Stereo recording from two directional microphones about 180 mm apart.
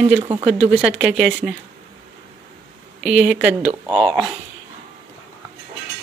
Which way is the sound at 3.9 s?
25° right (ahead or behind).